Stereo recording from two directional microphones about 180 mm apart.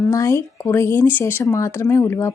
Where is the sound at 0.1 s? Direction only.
15° left (ahead or behind).